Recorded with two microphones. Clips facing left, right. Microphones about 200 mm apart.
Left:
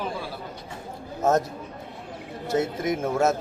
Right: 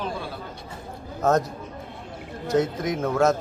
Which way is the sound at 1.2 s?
25° left (ahead or behind).